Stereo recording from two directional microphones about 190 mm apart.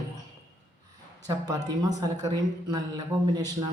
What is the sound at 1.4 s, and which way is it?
A man's voice, 20° right (ahead or behind).